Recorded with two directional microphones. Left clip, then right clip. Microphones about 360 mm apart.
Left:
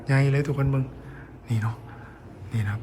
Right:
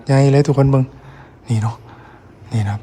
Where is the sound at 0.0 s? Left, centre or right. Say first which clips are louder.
Right 11 dB; centre.